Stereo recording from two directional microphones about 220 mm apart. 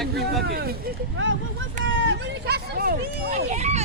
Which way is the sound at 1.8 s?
50° right (ahead or behind).